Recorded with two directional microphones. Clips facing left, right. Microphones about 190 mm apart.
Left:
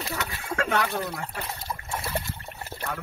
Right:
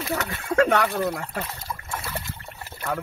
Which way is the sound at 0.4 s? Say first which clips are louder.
Right 7 dB; 65° right (ahead or behind).